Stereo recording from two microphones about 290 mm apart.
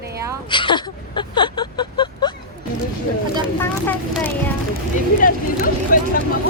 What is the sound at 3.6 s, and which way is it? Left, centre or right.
Speech, centre.